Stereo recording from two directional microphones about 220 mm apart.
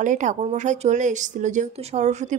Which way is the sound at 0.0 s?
35° right (ahead or behind).